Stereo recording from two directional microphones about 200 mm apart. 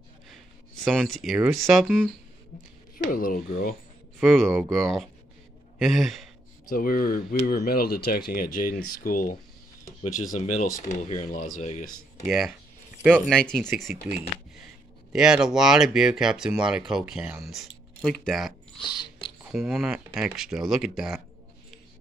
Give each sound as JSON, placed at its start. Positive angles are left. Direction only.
{"t": 0.8, "sound": "speech", "side_deg": 0}
{"t": 3.1, "sound": "speech", "side_deg": 45}
{"t": 4.2, "sound": "a man's voice", "side_deg": 0}
{"t": 6.7, "sound": "speech", "side_deg": 45}
{"t": 12.3, "sound": "speech", "side_deg": 0}
{"t": 14.0, "sound": "speech", "side_deg": -10}